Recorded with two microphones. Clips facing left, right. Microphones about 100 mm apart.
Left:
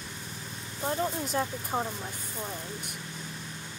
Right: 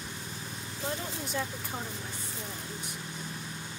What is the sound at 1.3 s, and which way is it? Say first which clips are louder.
Speech: left 5 dB; 40° left (ahead or behind).